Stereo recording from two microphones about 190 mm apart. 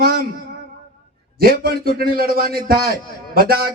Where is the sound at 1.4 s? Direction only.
50° right (ahead or behind).